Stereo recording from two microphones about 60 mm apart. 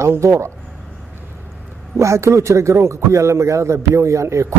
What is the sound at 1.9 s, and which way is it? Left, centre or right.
A man's voice, right.